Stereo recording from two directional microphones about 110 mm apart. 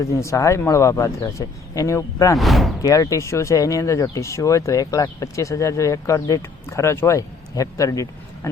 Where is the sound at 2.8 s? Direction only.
30° left (ahead or behind).